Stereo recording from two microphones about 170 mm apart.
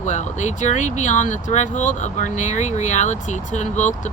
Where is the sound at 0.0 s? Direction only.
45° left (ahead or behind).